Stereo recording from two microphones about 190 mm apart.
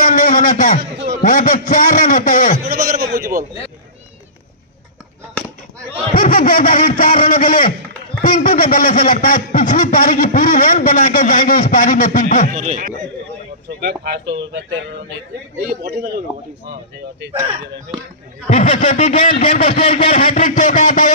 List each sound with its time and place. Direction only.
0.0 s a man's voice: 45° left (ahead or behind)
0.9 s a sound: 55° right (ahead or behind)
1.2 s a sound: 45° left (ahead or behind)
2.6 s a sound: 50° right (ahead or behind)
6.1 s a man's voice: 50° left (ahead or behind)
12.5 s speech: 40° right (ahead or behind)
13.7 s speech: 60° right (ahead or behind)
15.6 s speech: 50° right (ahead or behind)
18.5 s speech: 35° left (ahead or behind)